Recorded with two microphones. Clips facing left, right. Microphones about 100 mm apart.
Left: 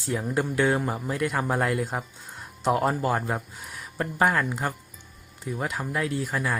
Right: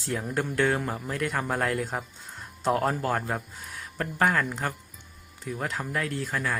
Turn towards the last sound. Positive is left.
turn(degrees=10)  # may be behind; listen again after turning